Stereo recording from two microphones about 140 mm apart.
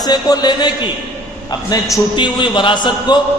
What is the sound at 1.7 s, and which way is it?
A man's voice, 30° left (ahead or behind).